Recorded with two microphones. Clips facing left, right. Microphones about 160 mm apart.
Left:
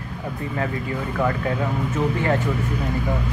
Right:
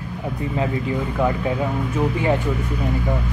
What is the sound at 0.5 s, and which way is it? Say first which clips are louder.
Speech: right 4 dB; 15° right (ahead or behind).